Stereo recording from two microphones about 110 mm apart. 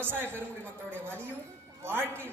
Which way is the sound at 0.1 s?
20° right (ahead or behind).